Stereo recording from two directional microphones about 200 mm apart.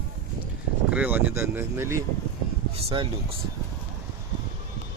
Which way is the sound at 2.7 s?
25° right (ahead or behind).